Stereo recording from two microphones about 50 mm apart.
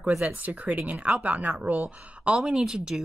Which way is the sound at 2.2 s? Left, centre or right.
Right.